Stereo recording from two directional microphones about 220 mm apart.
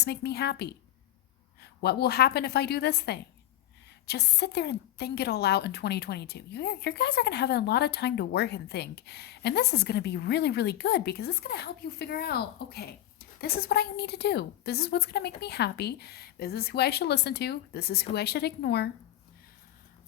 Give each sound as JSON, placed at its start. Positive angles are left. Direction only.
{"t": 0.0, "sound": "a woman's voice", "side_deg": 50}
{"t": 1.8, "sound": "a woman's voice", "side_deg": 45}